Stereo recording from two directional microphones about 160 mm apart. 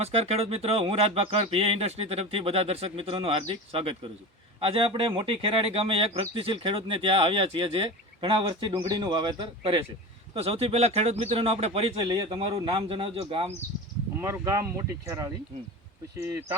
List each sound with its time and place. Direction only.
0.0 s speech: 40° right (ahead or behind)
14.2 s speech: 15° right (ahead or behind)